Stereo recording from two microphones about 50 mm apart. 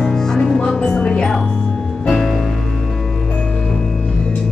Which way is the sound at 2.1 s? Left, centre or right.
Centre.